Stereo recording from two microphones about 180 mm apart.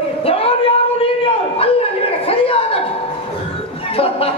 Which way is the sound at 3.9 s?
30° left (ahead or behind).